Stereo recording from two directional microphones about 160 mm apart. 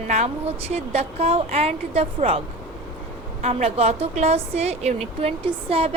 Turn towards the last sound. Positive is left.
turn(degrees=-35)  # may be behind; listen again after turning